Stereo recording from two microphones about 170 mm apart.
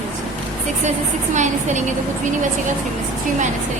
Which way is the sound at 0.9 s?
45° right (ahead or behind).